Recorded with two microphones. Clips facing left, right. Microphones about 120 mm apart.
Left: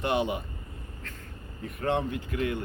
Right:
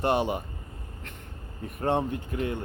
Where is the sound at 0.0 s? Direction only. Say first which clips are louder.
Right 2 dB; 40° right (ahead or behind).